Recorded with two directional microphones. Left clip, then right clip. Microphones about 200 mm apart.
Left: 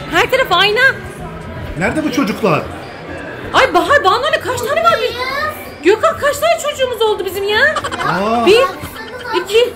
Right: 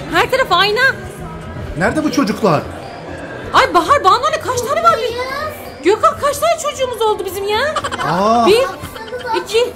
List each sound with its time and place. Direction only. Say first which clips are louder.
0.1 s speech: left 1 dB; 5° left (ahead or behind)
1.8 s speech: right 1 dB; 20° right (ahead or behind)
3.5 s speech: left 1 dB; 10° left (ahead or behind)
5.9 s speech: left 1 dB; 5° left (ahead or behind)